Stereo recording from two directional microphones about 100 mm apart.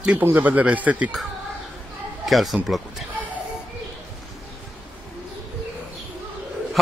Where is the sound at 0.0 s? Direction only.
15° right (ahead or behind).